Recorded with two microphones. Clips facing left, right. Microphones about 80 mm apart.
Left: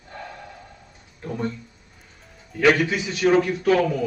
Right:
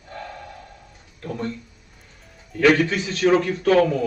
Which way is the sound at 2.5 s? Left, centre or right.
Centre.